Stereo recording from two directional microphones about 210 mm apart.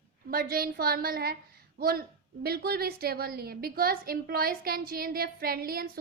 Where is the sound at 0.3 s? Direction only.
45° right (ahead or behind).